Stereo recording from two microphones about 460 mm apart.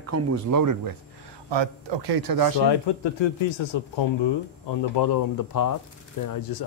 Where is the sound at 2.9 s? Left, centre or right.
Left.